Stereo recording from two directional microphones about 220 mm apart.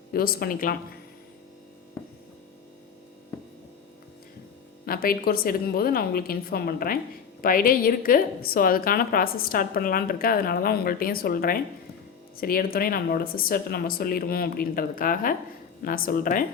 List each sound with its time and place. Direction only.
0.1 s a woman's voice: 40° left (ahead or behind)
4.9 s a woman's voice: 40° left (ahead or behind)